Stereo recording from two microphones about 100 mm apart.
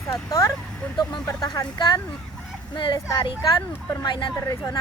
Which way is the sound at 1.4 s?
45° left (ahead or behind).